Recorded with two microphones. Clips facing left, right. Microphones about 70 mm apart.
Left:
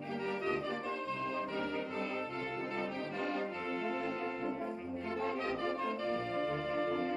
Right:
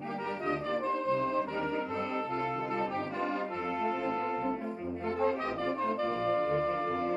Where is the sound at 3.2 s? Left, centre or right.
Right.